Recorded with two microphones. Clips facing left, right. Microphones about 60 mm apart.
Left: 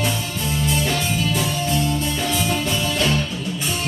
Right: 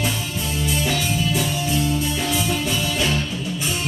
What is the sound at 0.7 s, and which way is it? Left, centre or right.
Music, centre.